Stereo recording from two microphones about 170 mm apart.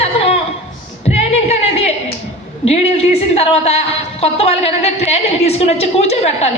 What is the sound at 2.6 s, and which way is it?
Speech, 40° left (ahead or behind).